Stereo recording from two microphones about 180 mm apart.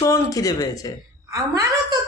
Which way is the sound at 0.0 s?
20° left (ahead or behind).